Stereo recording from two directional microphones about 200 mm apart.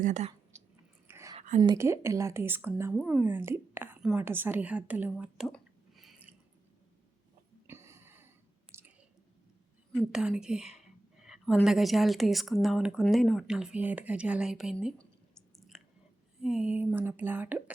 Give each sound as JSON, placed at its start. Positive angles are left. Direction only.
{"t": 0.0, "sound": "speech", "side_deg": -35}
{"t": 1.0, "sound": "whispering", "side_deg": -15}
{"t": 1.4, "sound": "whispering", "side_deg": -40}
{"t": 1.6, "sound": "speech", "side_deg": -15}
{"t": 7.7, "sound": "a sound", "side_deg": -15}
{"t": 9.9, "sound": "a woman's voice", "side_deg": 0}